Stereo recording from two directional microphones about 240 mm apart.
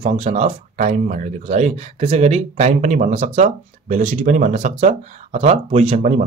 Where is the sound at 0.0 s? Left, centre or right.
Right.